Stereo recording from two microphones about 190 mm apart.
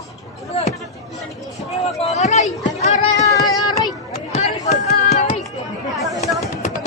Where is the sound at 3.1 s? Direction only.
20° left (ahead or behind).